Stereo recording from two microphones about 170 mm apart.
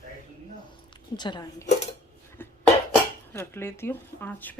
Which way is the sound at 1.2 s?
25° left (ahead or behind).